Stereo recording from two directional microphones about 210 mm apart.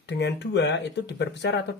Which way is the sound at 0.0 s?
55° left (ahead or behind).